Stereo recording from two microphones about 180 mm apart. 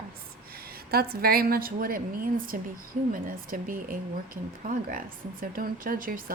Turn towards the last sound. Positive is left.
turn(degrees=-50)  # may be behind; listen again after turning